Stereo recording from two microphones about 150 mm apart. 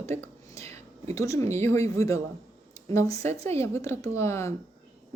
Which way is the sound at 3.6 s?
20° left (ahead or behind).